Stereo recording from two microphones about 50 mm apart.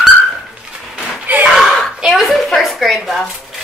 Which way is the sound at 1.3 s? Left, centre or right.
Right.